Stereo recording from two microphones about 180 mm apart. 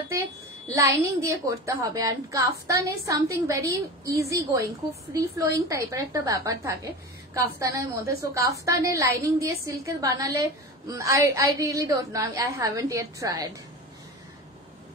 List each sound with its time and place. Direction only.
0.7 s a woman's voice: 15° right (ahead or behind)